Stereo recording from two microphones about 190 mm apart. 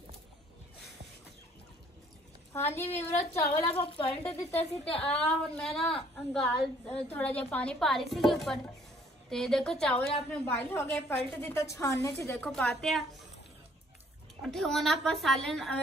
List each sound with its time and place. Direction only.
2.5 s a woman's voice: 10° left (ahead or behind)
3.0 s a woman's voice: 35° left (ahead or behind)
5.0 s a woman's voice: 5° left (ahead or behind)
14.4 s a woman's voice: centre (ahead or behind)